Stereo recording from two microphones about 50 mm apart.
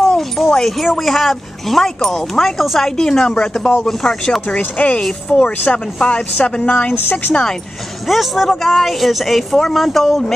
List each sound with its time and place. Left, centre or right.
0.0 s a sound: centre
0.5 s a woman's voice: centre
4.6 s speech: left
5.0 s a woman's voice: centre
5.7 s speech: left
8.1 s speech: centre